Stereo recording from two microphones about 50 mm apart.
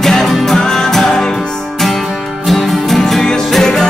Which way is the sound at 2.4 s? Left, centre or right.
Centre.